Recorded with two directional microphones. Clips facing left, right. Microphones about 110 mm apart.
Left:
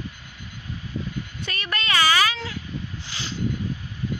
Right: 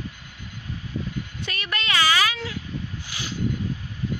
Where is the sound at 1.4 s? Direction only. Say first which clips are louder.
Left 1 dB; 5° right (ahead or behind).